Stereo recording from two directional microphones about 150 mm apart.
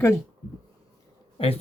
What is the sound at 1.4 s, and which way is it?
Speech, 35° left (ahead or behind).